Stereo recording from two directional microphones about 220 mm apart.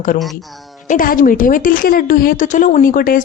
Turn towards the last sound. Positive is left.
turn(degrees=40)  # may be behind; listen again after turning